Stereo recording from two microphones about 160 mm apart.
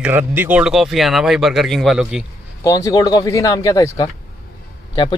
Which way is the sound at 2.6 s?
20° left (ahead or behind).